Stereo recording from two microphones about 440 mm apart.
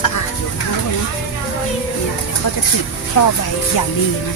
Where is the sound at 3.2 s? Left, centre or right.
Left.